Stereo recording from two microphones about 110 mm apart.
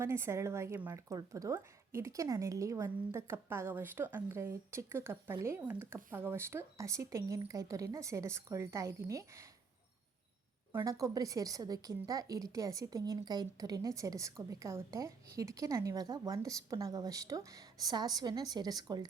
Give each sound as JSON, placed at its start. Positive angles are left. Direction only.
{"t": 0.0, "sound": "speech", "side_deg": -25}
{"t": 10.8, "sound": "a woman's voice", "side_deg": -30}